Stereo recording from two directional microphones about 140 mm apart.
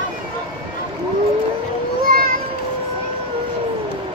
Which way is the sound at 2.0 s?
90° right.